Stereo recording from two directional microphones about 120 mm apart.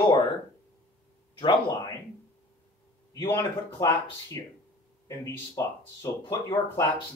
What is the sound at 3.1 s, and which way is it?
Speech, 30° left (ahead or behind).